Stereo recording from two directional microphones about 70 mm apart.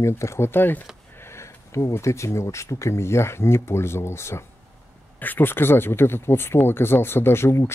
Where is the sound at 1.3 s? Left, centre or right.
Left.